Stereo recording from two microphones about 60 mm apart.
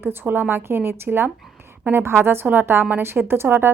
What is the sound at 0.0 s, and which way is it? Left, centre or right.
A woman's voice, right.